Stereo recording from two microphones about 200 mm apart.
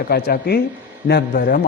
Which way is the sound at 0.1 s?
50° left (ahead or behind).